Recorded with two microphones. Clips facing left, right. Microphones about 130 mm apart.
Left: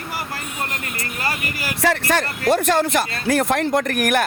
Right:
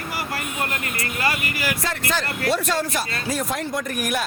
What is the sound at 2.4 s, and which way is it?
Speech, 50° left (ahead or behind).